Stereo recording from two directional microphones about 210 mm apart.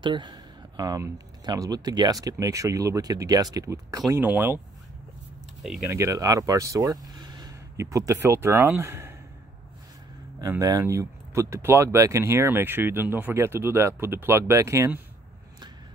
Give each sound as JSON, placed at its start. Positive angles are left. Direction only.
{"t": 0.0, "sound": "speech", "side_deg": -20}
{"t": 5.9, "sound": "speech", "side_deg": -15}
{"t": 10.4, "sound": "speech", "side_deg": -15}